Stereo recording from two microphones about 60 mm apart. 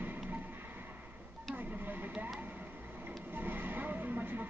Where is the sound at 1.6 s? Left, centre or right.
Right.